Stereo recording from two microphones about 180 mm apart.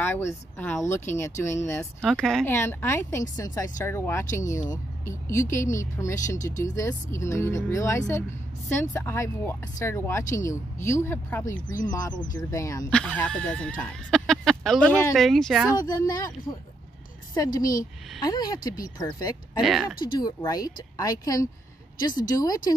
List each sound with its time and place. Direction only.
0.0 s speech: 15° left (ahead or behind)
2.0 s speech: 5° left (ahead or behind)
6.1 s speech: 45° left (ahead or behind)
6.8 s speech: 15° left (ahead or behind)
11.5 s speech: 45° left (ahead or behind)
12.4 s speech: 20° left (ahead or behind)
12.9 s speech: 5° left (ahead or behind)
15.8 s speech: 20° left (ahead or behind)
19.6 s speech: centre (ahead or behind)
20.2 s speech: 20° left (ahead or behind)